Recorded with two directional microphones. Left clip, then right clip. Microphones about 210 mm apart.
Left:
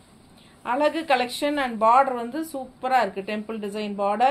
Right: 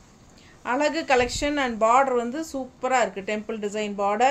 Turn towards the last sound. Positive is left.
turn(degrees=-20)  # may be behind; listen again after turning